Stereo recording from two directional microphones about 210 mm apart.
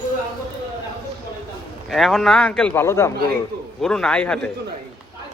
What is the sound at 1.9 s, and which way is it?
A man's voice, centre (ahead or behind).